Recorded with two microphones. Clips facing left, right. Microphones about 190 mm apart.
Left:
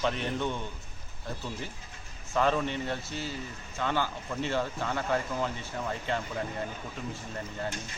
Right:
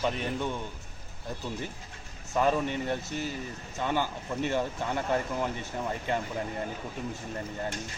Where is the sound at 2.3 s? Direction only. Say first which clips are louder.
Right 1 dB; 10° right (ahead or behind).